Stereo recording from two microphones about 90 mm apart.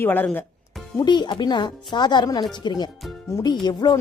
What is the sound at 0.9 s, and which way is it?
Speech, 55° left (ahead or behind).